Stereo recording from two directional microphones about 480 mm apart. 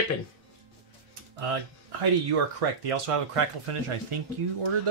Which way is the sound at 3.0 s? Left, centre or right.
Right.